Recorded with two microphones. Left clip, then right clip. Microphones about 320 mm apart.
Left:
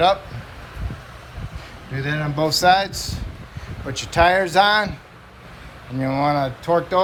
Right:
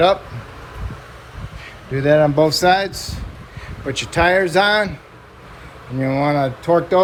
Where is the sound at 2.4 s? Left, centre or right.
Centre.